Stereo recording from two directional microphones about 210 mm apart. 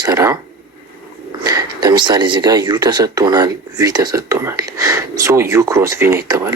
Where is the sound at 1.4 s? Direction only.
20° right (ahead or behind).